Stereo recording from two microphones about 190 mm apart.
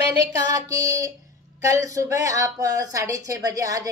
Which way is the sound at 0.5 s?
20° right (ahead or behind).